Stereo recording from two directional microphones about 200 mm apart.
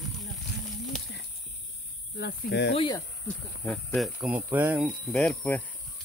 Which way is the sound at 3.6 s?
5° left (ahead or behind).